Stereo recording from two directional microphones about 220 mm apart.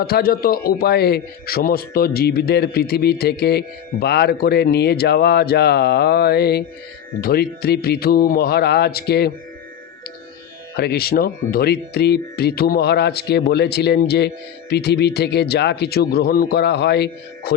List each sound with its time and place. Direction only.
0.0 s speech: 45° left (ahead or behind)
10.8 s speech: 45° left (ahead or behind)